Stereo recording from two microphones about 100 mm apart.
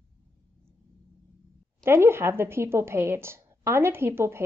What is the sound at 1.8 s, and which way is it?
A woman's voice, 25° right (ahead or behind).